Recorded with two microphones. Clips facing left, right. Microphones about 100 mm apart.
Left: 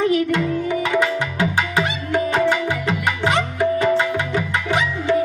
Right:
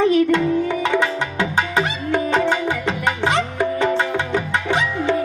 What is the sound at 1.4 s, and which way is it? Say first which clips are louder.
Music: right 1 dB; 25° right (ahead or behind).